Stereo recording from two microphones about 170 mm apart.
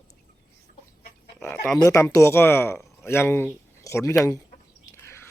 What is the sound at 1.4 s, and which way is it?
Speech, 10° left (ahead or behind).